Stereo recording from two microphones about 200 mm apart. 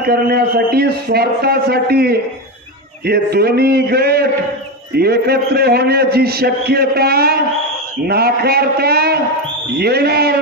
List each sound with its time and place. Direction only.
0.0 s a man's voice: 50° right (ahead or behind)